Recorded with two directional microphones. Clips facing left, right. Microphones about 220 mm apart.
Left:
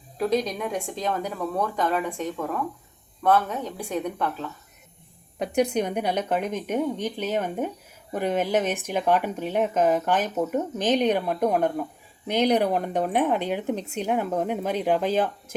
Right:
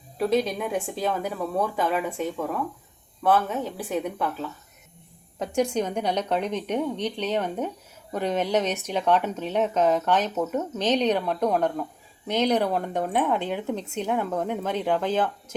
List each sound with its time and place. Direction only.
0.2 s a woman's voice: 5° right (ahead or behind)
5.5 s a woman's voice: 65° left (ahead or behind)
5.8 s speech: 10° left (ahead or behind)